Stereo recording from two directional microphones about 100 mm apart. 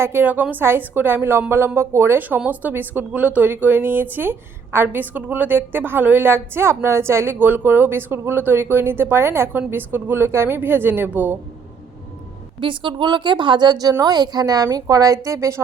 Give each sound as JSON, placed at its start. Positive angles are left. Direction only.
{"t": 0.0, "sound": "a woman's voice", "side_deg": -20}
{"t": 12.5, "sound": "a woman's voice", "side_deg": -55}